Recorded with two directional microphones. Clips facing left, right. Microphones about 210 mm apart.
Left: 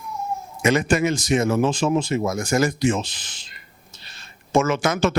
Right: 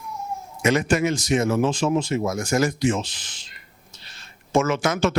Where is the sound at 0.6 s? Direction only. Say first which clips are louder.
Left 1 dB; 20° left (ahead or behind).